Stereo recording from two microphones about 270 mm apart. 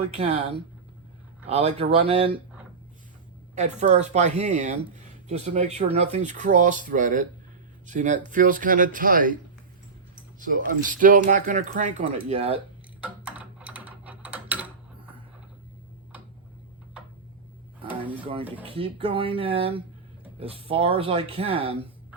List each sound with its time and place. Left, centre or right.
0.2 s speech: centre
3.5 s speech: right
10.4 s speech: right
13.0 s typing: centre
18.6 s speech: centre